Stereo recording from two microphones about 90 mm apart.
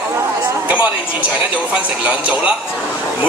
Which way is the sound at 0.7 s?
15° right (ahead or behind).